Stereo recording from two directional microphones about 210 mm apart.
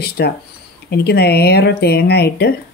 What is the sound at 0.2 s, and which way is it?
Speech, 50° left (ahead or behind).